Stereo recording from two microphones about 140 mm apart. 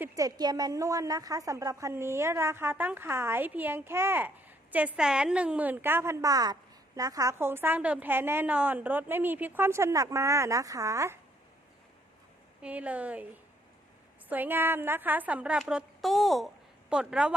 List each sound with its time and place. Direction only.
0.0 s a woman's voice: 25° right (ahead or behind)
12.6 s a woman's voice: 10° right (ahead or behind)